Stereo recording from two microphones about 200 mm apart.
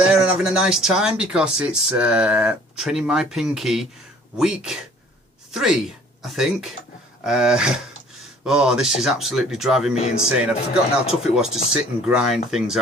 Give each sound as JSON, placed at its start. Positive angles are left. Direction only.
{"t": 0.1, "sound": "speech", "side_deg": -5}
{"t": 10.0, "sound": "speech", "side_deg": 35}
{"t": 10.2, "sound": "speech", "side_deg": -5}